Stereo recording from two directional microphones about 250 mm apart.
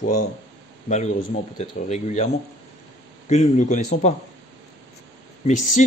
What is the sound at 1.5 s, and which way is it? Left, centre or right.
Speech, left.